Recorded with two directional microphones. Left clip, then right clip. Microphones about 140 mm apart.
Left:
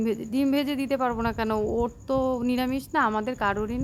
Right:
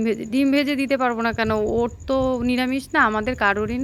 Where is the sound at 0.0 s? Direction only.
20° right (ahead or behind).